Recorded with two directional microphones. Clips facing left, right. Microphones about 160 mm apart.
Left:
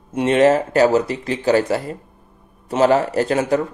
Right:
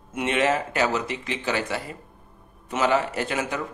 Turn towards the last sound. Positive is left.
turn(degrees=35)  # may be behind; listen again after turning